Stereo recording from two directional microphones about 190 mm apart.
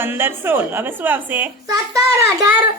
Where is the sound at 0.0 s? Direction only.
10° right (ahead or behind).